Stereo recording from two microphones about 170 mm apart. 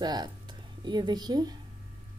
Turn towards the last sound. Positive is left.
turn(degrees=-25)  # may be behind; listen again after turning